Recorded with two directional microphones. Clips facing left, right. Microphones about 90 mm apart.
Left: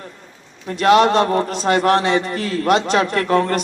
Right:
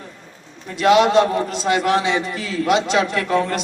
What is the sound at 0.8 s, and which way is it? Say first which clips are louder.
A man's voice: even; 45° left (ahead or behind).